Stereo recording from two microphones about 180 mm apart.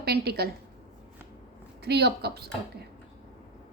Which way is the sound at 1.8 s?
65° right (ahead or behind).